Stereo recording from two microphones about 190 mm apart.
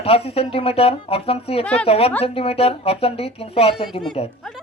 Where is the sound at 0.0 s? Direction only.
30° left (ahead or behind).